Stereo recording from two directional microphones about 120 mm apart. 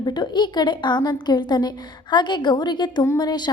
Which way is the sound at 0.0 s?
40° left (ahead or behind).